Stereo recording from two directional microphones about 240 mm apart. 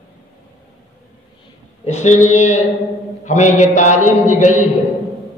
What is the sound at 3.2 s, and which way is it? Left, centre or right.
Mantra, left.